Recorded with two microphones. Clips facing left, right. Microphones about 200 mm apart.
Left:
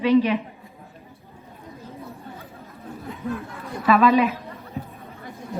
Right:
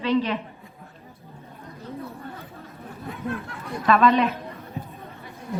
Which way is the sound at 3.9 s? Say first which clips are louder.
Left 2 dB; centre (ahead or behind).